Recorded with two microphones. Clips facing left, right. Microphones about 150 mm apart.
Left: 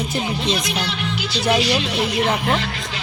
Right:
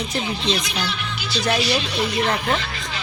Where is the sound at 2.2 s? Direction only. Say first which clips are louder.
Left 2 dB; 15° left (ahead or behind).